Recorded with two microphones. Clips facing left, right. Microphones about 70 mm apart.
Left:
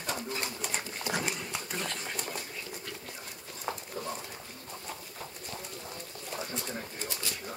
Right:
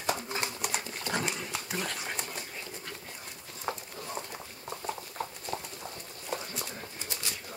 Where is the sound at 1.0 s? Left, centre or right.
Centre.